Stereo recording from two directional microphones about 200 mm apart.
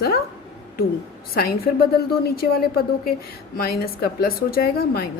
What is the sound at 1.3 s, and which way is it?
A woman's voice, 50° left (ahead or behind).